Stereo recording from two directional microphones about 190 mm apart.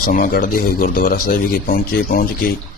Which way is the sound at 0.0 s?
50° left (ahead or behind).